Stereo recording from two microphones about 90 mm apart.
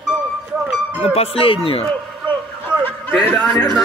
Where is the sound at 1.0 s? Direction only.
90° left.